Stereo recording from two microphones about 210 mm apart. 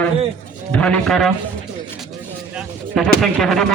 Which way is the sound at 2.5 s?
Centre (ahead or behind).